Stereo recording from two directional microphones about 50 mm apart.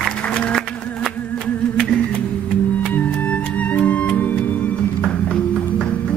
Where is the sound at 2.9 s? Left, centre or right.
Left.